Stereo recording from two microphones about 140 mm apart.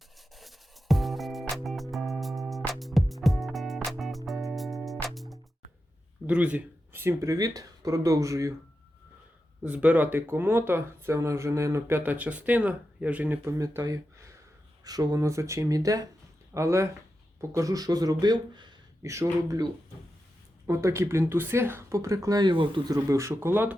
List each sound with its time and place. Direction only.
0.3 s music: centre (ahead or behind)
6.2 s speech: 10° right (ahead or behind)
9.6 s speech: 10° right (ahead or behind); by 19.6 s 25° right (ahead or behind)
20.7 s speech: 20° right (ahead or behind); by 22.8 s 35° right (ahead or behind)
23.0 s speech: 20° right (ahead or behind)